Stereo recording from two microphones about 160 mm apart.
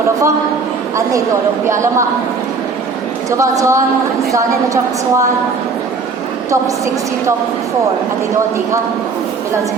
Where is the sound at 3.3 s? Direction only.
20° right (ahead or behind).